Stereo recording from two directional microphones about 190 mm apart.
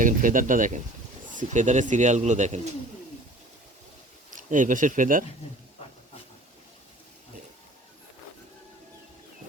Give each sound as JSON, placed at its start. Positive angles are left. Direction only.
{"t": 0.0, "sound": "speech", "side_deg": -45}
{"t": 4.3, "sound": "speech", "side_deg": -45}